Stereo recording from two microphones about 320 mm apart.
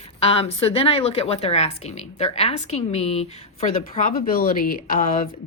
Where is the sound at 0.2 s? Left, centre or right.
Centre.